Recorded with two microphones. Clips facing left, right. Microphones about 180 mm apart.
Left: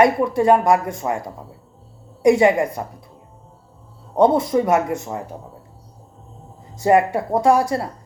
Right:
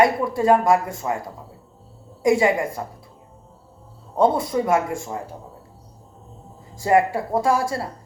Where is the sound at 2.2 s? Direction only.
25° left (ahead or behind).